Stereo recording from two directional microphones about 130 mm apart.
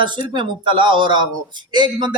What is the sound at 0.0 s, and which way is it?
Speech, 35° right (ahead or behind).